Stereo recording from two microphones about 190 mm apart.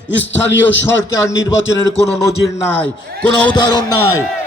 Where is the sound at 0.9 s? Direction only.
15° left (ahead or behind).